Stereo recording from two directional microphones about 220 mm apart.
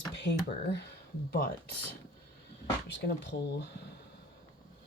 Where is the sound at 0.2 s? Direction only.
50° left (ahead or behind).